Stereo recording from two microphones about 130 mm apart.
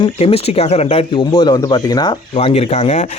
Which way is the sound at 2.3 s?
50° left (ahead or behind).